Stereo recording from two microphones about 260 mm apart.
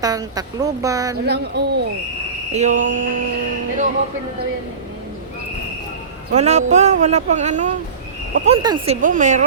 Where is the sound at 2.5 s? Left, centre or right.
Right.